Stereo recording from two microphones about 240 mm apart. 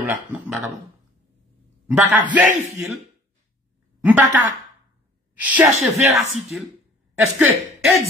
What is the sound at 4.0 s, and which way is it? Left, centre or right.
Speech, centre.